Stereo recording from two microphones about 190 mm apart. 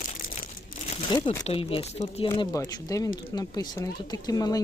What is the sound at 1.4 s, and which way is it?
Speech, 30° left (ahead or behind).